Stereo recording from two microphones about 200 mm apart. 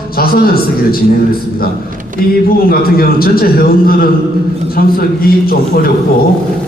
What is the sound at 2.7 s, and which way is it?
A man's voice, 50° left (ahead or behind).